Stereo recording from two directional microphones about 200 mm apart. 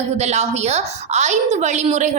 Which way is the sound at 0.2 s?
35° right (ahead or behind).